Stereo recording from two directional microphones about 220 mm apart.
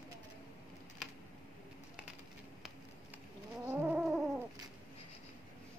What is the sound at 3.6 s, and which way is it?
Cat, 5° right (ahead or behind).